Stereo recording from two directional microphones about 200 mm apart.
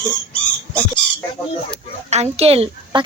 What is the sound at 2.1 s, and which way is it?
Speech, 30° right (ahead or behind).